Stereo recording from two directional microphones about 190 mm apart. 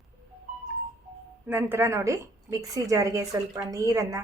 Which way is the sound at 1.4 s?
10° right (ahead or behind).